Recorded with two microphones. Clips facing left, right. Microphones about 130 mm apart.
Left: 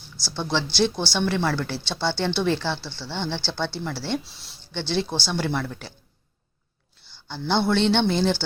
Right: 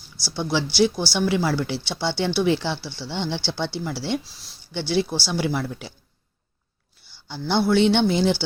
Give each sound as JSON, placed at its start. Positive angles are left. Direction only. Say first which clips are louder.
{"t": 0.2, "sound": "speech", "louder": "right 2 dB", "side_deg": 15}
{"t": 0.5, "sound": "speech", "louder": "right 3 dB", "side_deg": -10}
{"t": 4.2, "sound": "speech", "louder": "left 1 dB", "side_deg": 0}
{"t": 4.6, "sound": "speech", "louder": "right 3 dB", "side_deg": -10}
{"t": 7.3, "sound": "speech", "louder": "right 2 dB", "side_deg": -10}